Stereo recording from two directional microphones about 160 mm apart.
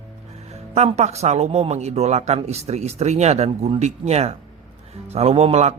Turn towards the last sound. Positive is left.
turn(degrees=-40)  # may be behind; listen again after turning